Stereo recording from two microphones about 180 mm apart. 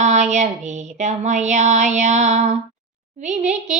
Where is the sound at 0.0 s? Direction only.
40° right (ahead or behind).